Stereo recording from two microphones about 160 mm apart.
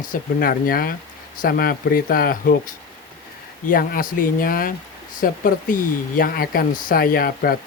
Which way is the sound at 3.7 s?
60° left (ahead or behind).